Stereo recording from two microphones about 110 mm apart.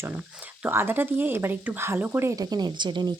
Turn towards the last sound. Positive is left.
turn(degrees=-45)  # may be behind; listen again after turning